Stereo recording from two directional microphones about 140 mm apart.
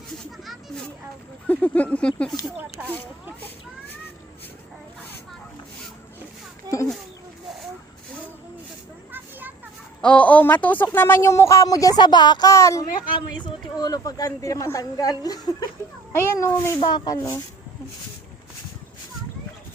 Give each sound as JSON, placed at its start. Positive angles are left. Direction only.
{"t": 0.3, "sound": "a sound", "side_deg": 0}
{"t": 1.5, "sound": "speech", "side_deg": 10}
{"t": 2.8, "sound": "speech", "side_deg": -10}
{"t": 6.7, "sound": "a sound", "side_deg": -25}
{"t": 10.0, "sound": "speech", "side_deg": 10}
{"t": 16.8, "sound": "speech", "side_deg": 30}